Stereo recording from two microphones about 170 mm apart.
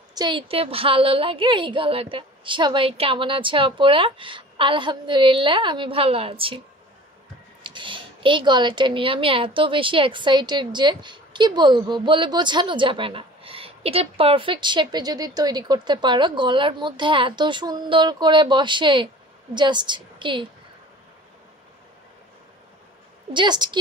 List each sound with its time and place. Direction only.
0.1 s a woman's voice: 25° right (ahead or behind)
7.6 s a woman's voice: 30° right (ahead or behind)
23.3 s a woman's voice: 25° right (ahead or behind)